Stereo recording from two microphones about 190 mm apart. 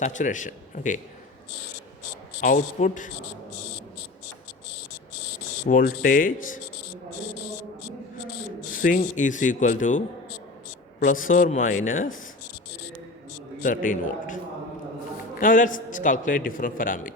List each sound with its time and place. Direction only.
0.0 s speech: 40° left (ahead or behind)
2.4 s a man's voice: 40° left (ahead or behind)
5.6 s a man's voice: 45° left (ahead or behind)
8.7 s a sound: 45° left (ahead or behind)
9.0 s speech: 40° left (ahead or behind)
11.0 s a man's voice: 45° left (ahead or behind)
13.6 s a man's voice: 45° left (ahead or behind)
15.4 s a man's voice: 45° left (ahead or behind)